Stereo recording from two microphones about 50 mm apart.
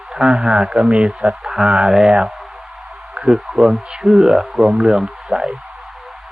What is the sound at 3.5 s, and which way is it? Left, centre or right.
Speech, centre.